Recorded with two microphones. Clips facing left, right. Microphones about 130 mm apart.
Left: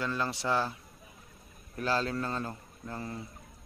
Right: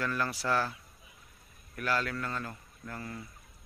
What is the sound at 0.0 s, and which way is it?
Speech, 20° left (ahead or behind).